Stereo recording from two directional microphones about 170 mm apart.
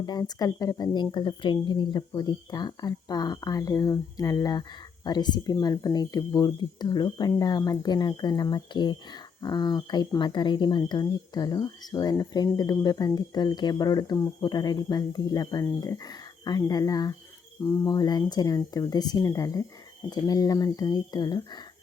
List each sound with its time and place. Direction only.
0.0 s speech: 25° left (ahead or behind)